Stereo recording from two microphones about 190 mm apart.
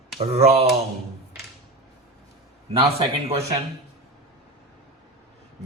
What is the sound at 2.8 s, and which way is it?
Speech, 30° right (ahead or behind).